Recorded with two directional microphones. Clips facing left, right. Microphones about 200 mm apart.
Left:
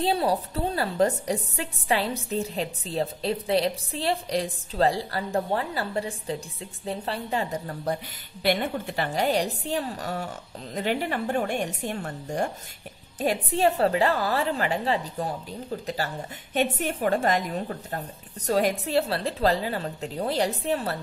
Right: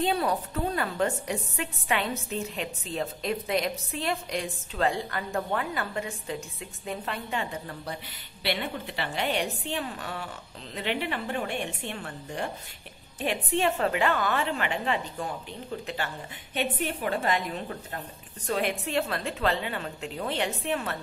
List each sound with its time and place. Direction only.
0.0 s a woman's voice: 30° left (ahead or behind)